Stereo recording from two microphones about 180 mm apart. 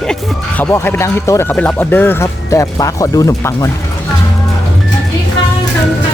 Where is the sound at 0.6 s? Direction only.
15° left (ahead or behind).